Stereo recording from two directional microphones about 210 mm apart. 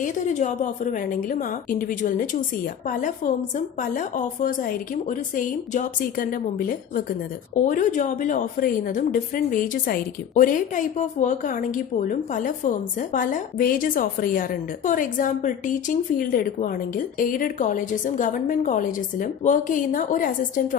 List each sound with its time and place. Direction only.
0.0 s a woman's voice: 35° left (ahead or behind)